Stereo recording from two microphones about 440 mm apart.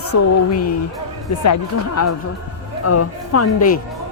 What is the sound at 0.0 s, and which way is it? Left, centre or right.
Speech, left.